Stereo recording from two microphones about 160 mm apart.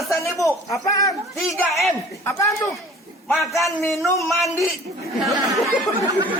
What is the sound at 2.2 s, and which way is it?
Speech, 20° left (ahead or behind).